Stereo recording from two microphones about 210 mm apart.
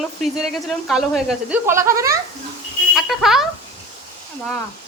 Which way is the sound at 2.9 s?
Centre (ahead or behind).